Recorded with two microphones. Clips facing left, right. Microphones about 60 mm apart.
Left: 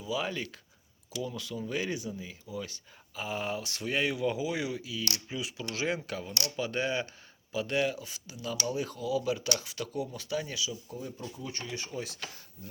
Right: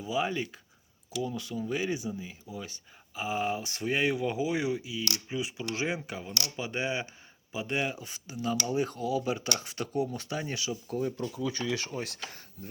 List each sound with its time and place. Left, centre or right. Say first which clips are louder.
0.0 s speech: right 3 dB; right
1.6 s speech: right 2 dB; centre; by 10.6 s right
10.6 s speech: right 5 dB; right
11.9 s speech: right 2 dB; right